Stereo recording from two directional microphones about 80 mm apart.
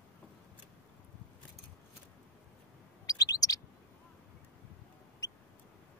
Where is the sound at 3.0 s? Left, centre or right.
Left.